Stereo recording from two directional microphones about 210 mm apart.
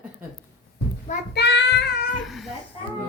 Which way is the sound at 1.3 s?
55° left (ahead or behind).